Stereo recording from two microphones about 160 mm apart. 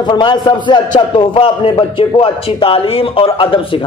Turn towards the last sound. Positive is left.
turn(degrees=35)  # may be behind; listen again after turning